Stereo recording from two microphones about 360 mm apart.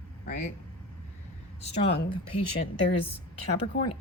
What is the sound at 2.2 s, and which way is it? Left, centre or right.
Speech, left.